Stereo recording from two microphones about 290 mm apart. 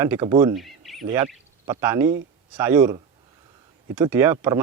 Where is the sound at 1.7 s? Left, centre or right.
Centre.